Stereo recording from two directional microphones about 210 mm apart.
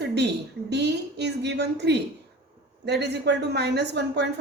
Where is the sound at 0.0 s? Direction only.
55° right (ahead or behind).